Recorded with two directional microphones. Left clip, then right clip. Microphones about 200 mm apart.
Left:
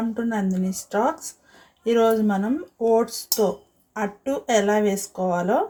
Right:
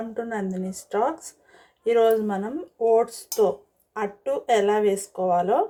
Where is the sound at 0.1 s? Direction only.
20° right (ahead or behind).